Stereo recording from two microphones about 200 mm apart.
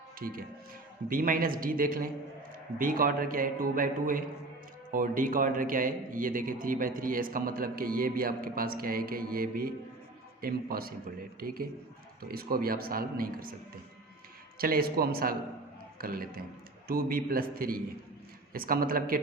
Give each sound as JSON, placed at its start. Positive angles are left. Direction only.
{"t": 0.2, "sound": "a man's voice", "side_deg": -45}
{"t": 14.6, "sound": "a man's voice", "side_deg": -50}